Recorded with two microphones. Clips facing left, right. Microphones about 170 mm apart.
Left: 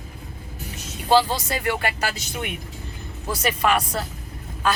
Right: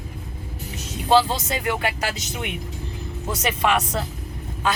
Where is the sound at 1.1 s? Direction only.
20° right (ahead or behind).